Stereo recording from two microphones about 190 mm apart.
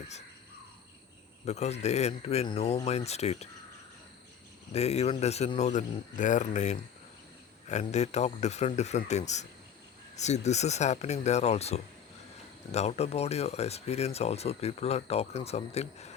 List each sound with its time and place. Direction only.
1.5 s speech: 35° left (ahead or behind)
4.7 s speech: 35° left (ahead or behind)